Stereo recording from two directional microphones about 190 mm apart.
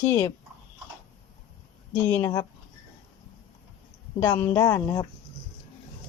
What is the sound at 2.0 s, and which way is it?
Speech, 15° left (ahead or behind).